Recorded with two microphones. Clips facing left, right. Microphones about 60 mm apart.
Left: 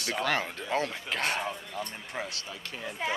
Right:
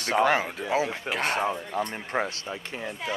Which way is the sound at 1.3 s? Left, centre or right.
Right.